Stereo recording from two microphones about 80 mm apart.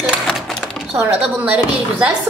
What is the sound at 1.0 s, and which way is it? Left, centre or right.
A woman's voice, centre.